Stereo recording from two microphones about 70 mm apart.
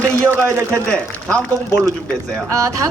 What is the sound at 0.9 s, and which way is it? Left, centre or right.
Speech, centre.